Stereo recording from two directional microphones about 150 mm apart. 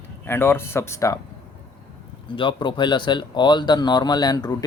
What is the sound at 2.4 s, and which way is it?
Speech, 30° left (ahead or behind).